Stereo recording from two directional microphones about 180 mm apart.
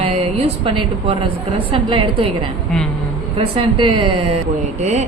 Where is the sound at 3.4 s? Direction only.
30° right (ahead or behind).